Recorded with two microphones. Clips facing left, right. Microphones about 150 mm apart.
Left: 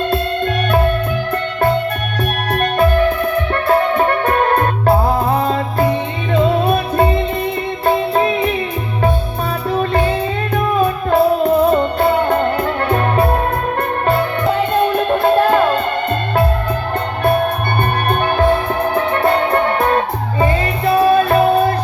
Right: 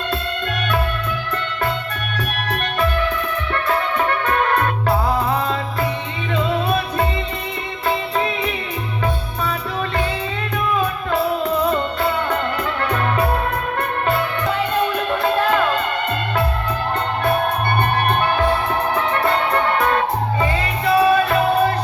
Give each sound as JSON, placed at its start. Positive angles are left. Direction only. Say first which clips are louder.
{"t": 2.5, "sound": "music", "louder": "left 7 dB", "side_deg": 50}
{"t": 9.7, "sound": "music", "louder": "left 9 dB", "side_deg": 45}
{"t": 14.1, "sound": "music", "louder": "left 6 dB", "side_deg": 45}
{"t": 18.9, "sound": "music", "louder": "left 6 dB", "side_deg": 45}